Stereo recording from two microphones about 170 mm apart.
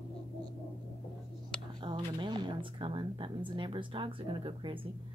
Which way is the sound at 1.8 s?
25° right (ahead or behind).